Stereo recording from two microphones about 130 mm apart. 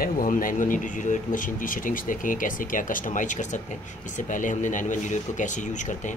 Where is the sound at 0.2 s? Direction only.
90° left.